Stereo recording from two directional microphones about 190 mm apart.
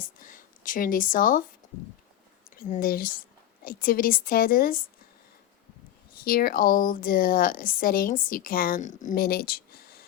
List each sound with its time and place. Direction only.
0.2 s speech: 45° left (ahead or behind)
2.6 s speech: 45° left (ahead or behind)
6.2 s speech: 50° left (ahead or behind)